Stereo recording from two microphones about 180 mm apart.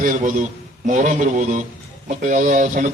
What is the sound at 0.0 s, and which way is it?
A man's voice, 45° right (ahead or behind).